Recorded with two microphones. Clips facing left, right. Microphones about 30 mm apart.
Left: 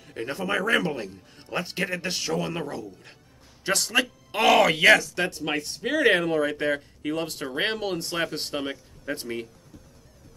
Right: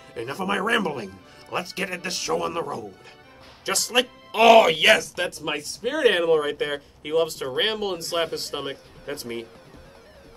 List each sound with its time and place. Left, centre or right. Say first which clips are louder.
0.1 s speech: right 1 dB; centre
3.6 s speech: left 1 dB; centre
3.9 s speech: right 2 dB; centre
6.2 s speech: right 3 dB; centre
7.0 s speech: right 6 dB; centre
7.2 s speech: right 3 dB; centre
8.1 s speech: right 4 dB; right
8.5 s speech: even; centre
9.1 s speech: left 1 dB; right